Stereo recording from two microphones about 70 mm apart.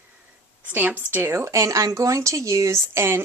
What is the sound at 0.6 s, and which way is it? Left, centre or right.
Speech, right.